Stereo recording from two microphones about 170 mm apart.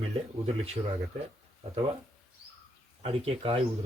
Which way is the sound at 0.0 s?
35° right (ahead or behind).